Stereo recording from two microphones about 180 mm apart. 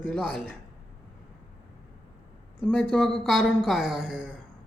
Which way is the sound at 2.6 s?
5° left (ahead or behind).